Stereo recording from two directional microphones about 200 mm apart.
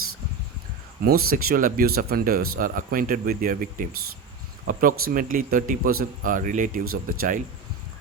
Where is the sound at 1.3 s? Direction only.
45° right (ahead or behind).